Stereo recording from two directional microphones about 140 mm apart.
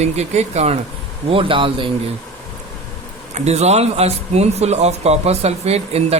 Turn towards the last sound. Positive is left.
turn(degrees=-50)  # may be behind; listen again after turning